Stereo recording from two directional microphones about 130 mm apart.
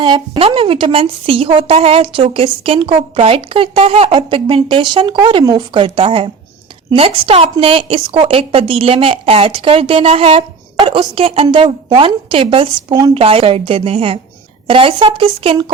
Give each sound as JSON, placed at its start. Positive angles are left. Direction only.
{"t": 0.0, "sound": "a woman's voice", "side_deg": -40}